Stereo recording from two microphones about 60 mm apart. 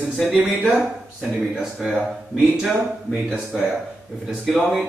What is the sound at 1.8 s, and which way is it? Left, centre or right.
A man's voice, centre.